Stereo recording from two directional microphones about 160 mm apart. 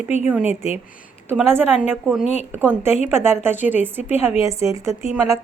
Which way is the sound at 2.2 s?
45° left (ahead or behind).